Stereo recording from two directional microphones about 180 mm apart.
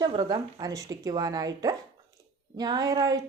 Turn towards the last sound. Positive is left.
turn(degrees=-20)  # may be behind; listen again after turning